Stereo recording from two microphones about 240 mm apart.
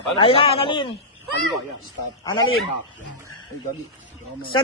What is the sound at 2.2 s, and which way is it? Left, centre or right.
Speech, centre.